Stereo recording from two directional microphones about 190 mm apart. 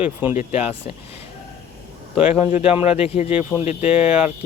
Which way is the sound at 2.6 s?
30° left (ahead or behind).